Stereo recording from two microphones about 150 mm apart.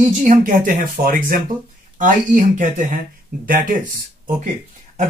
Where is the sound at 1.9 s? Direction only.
60° right (ahead or behind).